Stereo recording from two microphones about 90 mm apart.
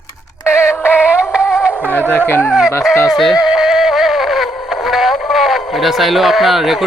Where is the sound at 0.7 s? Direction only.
25° left (ahead or behind).